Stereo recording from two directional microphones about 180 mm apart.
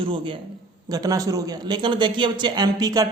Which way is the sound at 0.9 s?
20° right (ahead or behind).